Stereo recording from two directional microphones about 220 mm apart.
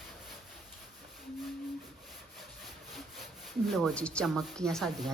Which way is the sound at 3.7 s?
Centre (ahead or behind).